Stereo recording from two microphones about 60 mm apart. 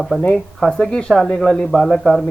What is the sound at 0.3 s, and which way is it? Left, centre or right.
A man's voice, centre.